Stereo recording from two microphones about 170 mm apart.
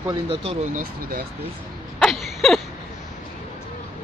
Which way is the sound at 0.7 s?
60° right (ahead or behind).